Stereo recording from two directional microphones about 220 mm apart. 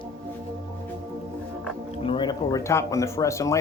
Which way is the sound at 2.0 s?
20° left (ahead or behind).